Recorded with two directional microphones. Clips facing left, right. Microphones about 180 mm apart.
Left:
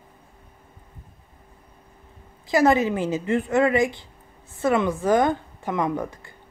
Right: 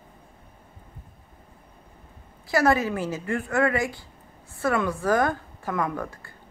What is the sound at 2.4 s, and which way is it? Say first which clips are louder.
Speech: left 3 dB; 20° left (ahead or behind).